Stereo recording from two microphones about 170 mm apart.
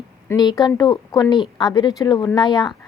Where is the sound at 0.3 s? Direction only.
25° left (ahead or behind).